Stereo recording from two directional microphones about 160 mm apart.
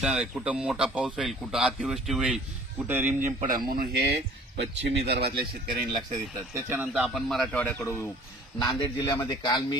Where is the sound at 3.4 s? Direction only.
60° right (ahead or behind).